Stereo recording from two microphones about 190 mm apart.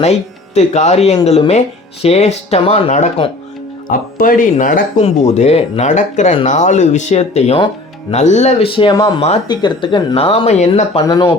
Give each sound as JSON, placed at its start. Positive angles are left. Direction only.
{"t": 0.0, "sound": "speech", "side_deg": 35}
{"t": 3.8, "sound": "speech", "side_deg": 45}
{"t": 11.0, "sound": "speech", "side_deg": 20}